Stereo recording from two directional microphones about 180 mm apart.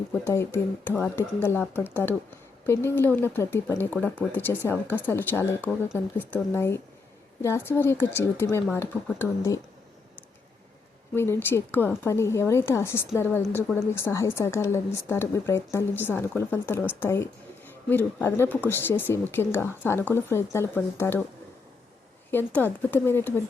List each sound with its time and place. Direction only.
0.1 s a woman's voice: 15° left (ahead or behind)
11.1 s a woman's voice: 15° left (ahead or behind)
22.3 s a woman's voice: 10° left (ahead or behind)